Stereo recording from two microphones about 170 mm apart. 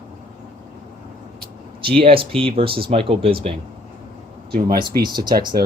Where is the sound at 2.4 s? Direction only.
30° right (ahead or behind).